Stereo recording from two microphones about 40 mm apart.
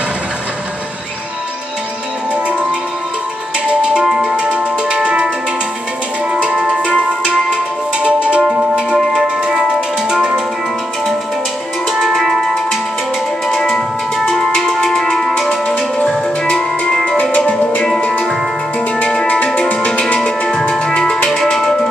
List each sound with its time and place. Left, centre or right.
4.2 s music: right
6.3 s music: right
12.2 s music: centre
13.5 s music: centre
13.7 s music: centre
15.5 s music: left
19.2 s music: left
20.8 s music: centre
21.3 s music: centre